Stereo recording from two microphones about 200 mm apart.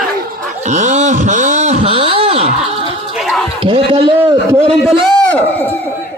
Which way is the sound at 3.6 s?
25° right (ahead or behind).